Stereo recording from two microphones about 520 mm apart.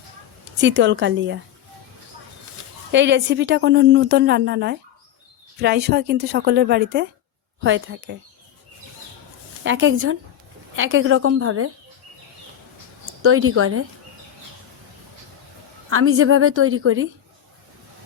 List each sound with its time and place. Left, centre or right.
0.6 s a woman's voice: right
2.9 s a woman's voice: centre
9.6 s a woman's voice: right
13.2 s a woman's voice: right
15.9 s a woman's voice: right